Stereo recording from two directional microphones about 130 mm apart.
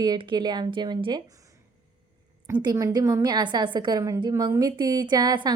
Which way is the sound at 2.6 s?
30° right (ahead or behind).